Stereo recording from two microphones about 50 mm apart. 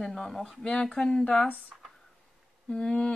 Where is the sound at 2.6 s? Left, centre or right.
Centre.